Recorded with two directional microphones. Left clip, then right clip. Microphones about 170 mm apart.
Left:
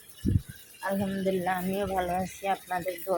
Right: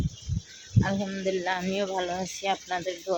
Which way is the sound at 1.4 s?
25° right (ahead or behind).